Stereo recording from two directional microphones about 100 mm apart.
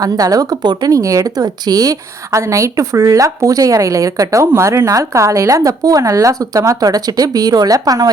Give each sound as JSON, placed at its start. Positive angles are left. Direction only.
{"t": 0.0, "sound": "speech", "side_deg": -40}